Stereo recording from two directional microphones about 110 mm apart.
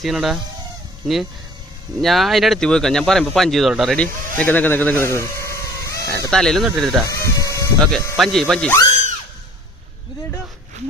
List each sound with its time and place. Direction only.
0.0 s speech: centre (ahead or behind)
3.9 s speech: 10° left (ahead or behind); by 6.3 s 30° left (ahead or behind)
6.3 s speech: 5° left (ahead or behind)
7.1 s ratchet: 30° left (ahead or behind)
7.8 s speech: 5° left (ahead or behind)